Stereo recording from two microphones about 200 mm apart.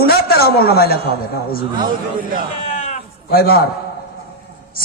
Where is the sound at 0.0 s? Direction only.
50° left (ahead or behind).